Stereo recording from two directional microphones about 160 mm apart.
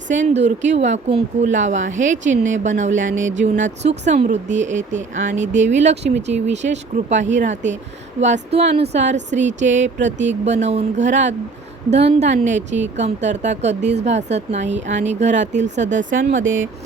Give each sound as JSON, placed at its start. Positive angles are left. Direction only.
{"t": 0.3, "sound": "speech", "side_deg": -45}